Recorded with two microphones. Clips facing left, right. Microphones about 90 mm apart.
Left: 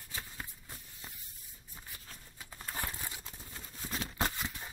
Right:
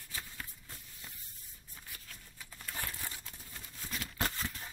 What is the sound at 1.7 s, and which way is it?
Tearing, 30° left (ahead or behind).